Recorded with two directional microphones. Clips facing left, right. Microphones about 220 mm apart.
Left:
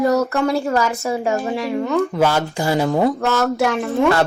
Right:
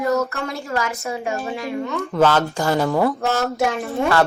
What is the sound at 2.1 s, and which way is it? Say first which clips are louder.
Speech: right 1 dB; 10° left (ahead or behind).